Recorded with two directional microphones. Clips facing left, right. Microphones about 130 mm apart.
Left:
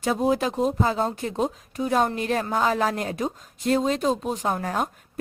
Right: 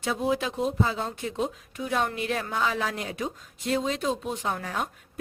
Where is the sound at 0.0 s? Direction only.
40° left (ahead or behind).